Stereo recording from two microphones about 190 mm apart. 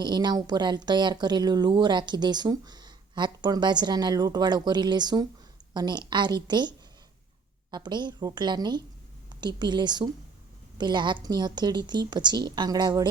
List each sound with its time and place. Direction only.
0.0 s speech: 20° right (ahead or behind)